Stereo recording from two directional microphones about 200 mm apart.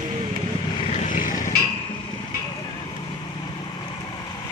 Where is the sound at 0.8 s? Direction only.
35° left (ahead or behind).